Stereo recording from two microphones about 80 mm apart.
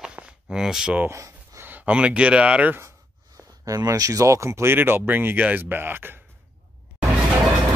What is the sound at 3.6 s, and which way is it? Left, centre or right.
Speech, right.